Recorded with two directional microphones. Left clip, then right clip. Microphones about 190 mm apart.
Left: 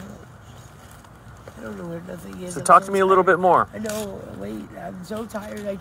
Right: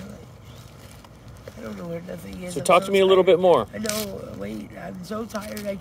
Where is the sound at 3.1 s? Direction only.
20° left (ahead or behind).